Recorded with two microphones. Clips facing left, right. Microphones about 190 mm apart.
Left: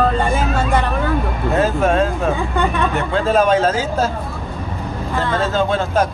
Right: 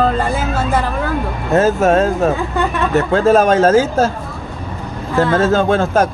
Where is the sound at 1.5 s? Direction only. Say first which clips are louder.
Right 5 dB; 45° right (ahead or behind).